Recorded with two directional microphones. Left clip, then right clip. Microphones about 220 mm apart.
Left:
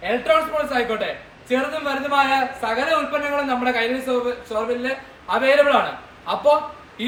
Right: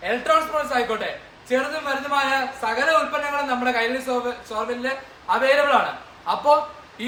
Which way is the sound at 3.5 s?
5° right (ahead or behind).